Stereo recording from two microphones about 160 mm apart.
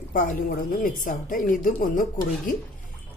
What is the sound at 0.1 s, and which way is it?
A woman's voice, 55° left (ahead or behind).